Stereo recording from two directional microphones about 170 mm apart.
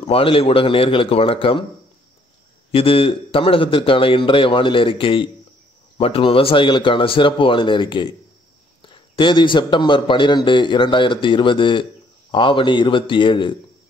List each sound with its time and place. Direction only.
0.0 s a man's voice: 35° left (ahead or behind)
2.7 s a man's voice: 35° left (ahead or behind)